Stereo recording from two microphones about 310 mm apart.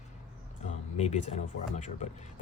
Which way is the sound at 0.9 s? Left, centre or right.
Left.